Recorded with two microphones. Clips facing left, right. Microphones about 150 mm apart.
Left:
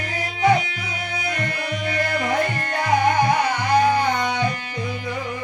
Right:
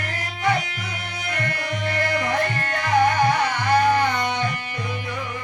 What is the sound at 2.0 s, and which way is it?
Music, 50° left (ahead or behind).